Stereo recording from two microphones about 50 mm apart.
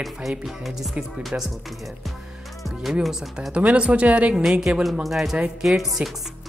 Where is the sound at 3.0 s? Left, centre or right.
Centre.